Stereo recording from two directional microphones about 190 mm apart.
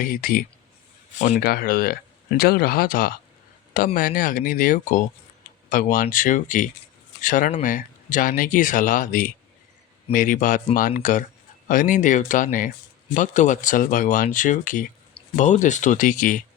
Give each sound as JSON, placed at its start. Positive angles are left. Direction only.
{"t": 0.0, "sound": "speech", "side_deg": 45}